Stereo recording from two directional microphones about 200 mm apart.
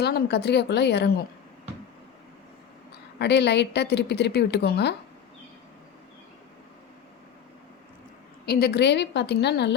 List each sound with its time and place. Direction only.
0.0 s a woman's voice: 55° left (ahead or behind)
3.2 s a woman's voice: 60° left (ahead or behind)
8.4 s a woman's voice: 50° left (ahead or behind)